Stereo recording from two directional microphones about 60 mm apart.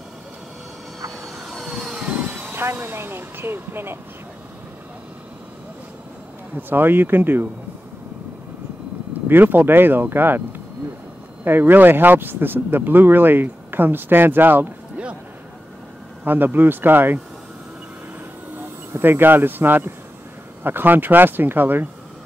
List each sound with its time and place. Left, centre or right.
1.2 s vehicle: centre
2.0 s vehicle: right
2.5 s speech: right
6.5 s speech: right
9.3 s speech: right
11.4 s speech: right
16.3 s speech: right
18.9 s speech: right